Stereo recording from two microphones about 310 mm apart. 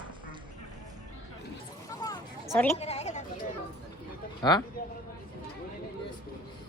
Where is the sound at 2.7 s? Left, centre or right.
Centre.